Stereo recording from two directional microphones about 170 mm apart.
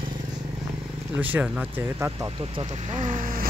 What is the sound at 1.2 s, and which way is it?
Speech, 10° right (ahead or behind).